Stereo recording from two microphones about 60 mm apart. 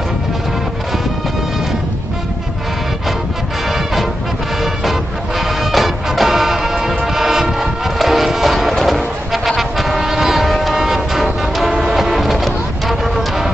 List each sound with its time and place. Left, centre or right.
3.7 s music: centre
5.4 s music: centre